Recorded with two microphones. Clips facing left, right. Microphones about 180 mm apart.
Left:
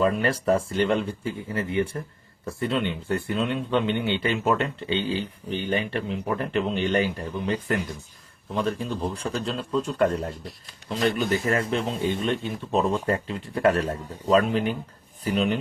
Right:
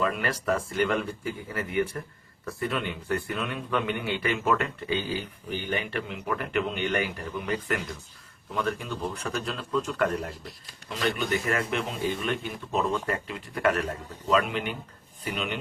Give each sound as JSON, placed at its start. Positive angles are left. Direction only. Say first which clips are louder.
{"t": 0.0, "sound": "a man's voice", "louder": "left 5 dB", "side_deg": 30}